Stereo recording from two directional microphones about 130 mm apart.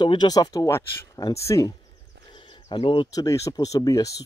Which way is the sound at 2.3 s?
40° left (ahead or behind).